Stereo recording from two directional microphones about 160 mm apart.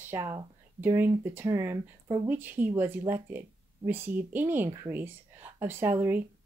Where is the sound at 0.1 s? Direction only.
15° right (ahead or behind).